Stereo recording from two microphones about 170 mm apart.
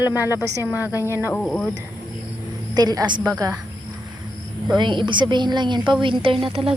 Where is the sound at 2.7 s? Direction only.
20° right (ahead or behind).